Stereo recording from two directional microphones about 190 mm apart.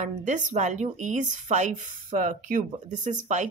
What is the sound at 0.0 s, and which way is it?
Speech, 40° right (ahead or behind).